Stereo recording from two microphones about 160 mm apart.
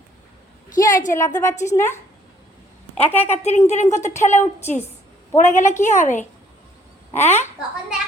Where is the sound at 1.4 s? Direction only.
15° left (ahead or behind).